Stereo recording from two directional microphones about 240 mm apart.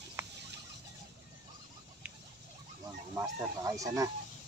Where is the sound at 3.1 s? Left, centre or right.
Centre.